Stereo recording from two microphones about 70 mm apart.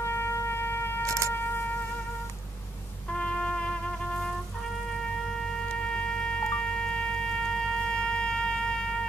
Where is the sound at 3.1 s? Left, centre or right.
Centre.